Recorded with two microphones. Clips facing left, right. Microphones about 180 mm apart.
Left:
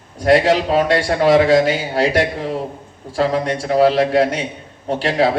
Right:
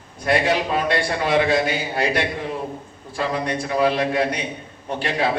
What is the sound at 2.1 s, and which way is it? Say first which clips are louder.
Speech: left 5 dB; 40° left (ahead or behind).